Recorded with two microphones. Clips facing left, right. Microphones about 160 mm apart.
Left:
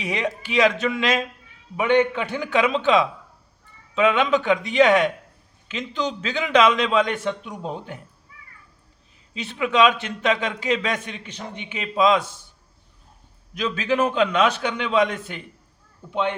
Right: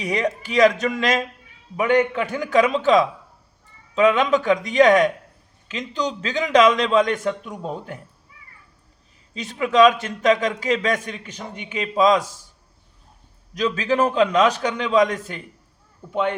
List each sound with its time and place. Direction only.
0.0 s a man's voice: 40° right (ahead or behind)
9.3 s a man's voice: 40° right (ahead or behind)
13.5 s a man's voice: 35° right (ahead or behind)